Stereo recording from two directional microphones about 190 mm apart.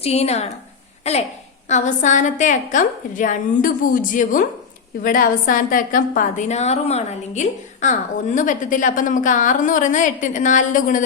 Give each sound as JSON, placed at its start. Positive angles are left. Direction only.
{"t": 0.0, "sound": "a woman's voice", "side_deg": 35}